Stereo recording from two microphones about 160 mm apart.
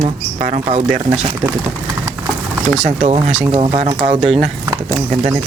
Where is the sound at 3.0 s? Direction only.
40° right (ahead or behind).